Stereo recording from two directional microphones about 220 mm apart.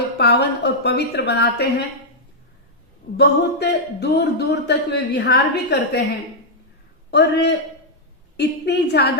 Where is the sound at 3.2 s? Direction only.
50° left (ahead or behind).